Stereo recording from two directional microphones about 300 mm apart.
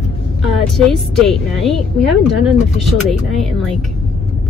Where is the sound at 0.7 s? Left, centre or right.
Centre.